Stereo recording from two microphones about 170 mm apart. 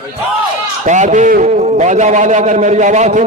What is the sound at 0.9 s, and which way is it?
A man's voice, 45° right (ahead or behind).